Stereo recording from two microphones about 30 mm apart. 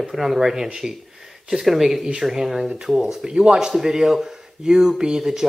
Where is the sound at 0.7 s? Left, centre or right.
Centre.